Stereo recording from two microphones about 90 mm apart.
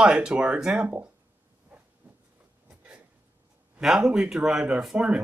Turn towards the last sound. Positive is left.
turn(degrees=-15)  # may be behind; listen again after turning